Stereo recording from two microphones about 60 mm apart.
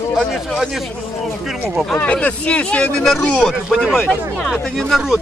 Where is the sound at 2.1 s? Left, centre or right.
Left.